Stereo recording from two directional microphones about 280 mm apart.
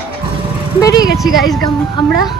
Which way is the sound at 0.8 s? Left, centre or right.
Centre.